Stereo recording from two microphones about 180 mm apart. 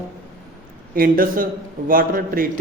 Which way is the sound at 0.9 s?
50° right (ahead or behind).